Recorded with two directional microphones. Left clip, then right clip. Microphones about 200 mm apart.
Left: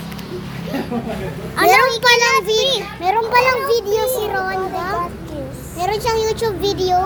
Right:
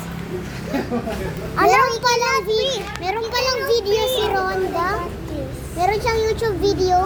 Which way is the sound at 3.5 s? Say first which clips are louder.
Left 2 dB; 55° left (ahead or behind).